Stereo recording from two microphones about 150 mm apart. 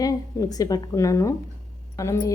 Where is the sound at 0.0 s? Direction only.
25° left (ahead or behind).